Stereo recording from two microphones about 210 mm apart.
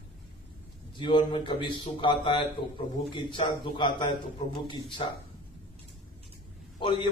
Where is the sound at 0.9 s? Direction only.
25° left (ahead or behind).